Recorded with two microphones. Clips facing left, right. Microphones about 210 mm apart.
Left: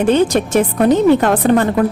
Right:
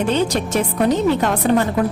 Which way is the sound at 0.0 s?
50° left (ahead or behind).